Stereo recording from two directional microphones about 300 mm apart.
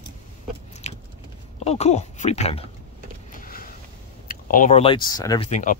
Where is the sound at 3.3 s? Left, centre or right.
Left.